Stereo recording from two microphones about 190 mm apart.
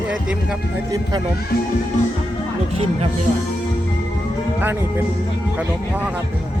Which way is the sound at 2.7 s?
30° right (ahead or behind).